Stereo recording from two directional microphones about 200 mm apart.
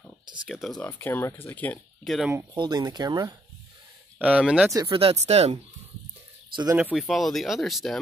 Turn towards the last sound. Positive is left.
turn(degrees=0)  # may be behind; listen again after turning